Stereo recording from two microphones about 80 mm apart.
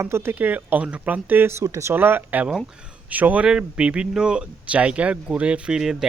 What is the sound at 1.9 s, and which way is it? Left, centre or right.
Speech, right.